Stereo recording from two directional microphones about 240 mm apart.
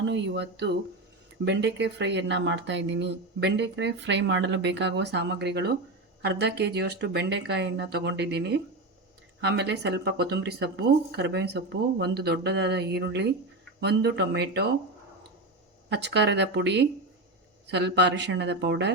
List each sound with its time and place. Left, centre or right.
0.0 s speech: right
15.9 s speech: right